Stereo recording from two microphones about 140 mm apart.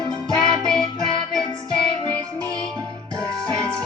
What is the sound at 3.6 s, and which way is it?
Music, 20° right (ahead or behind).